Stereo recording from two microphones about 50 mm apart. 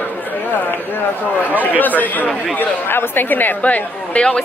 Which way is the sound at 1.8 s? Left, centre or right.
Left.